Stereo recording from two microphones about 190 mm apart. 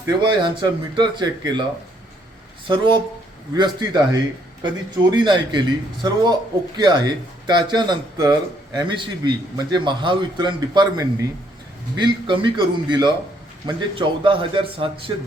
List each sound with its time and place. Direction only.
0.0 s a man's voice: 20° right (ahead or behind)
2.6 s a man's voice: 25° right (ahead or behind)